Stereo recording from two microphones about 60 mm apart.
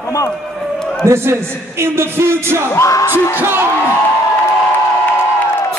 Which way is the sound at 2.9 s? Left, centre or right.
Left.